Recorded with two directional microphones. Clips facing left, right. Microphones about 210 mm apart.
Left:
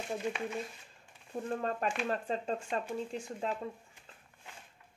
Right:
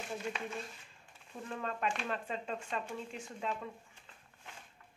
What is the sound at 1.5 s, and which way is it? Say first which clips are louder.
Speech: left 3 dB; 40° left (ahead or behind).